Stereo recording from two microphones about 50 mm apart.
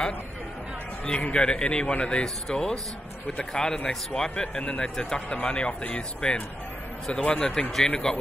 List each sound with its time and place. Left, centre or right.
1.0 s a man's voice: left
2.2 s a man's voice: centre